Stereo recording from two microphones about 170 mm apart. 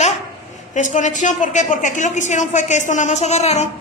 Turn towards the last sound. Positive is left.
turn(degrees=40)  # may be behind; listen again after turning